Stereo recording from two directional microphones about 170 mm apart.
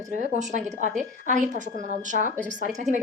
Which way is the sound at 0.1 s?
45° right (ahead or behind).